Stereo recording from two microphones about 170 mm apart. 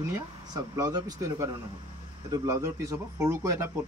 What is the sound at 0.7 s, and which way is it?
A man's voice, 20° right (ahead or behind).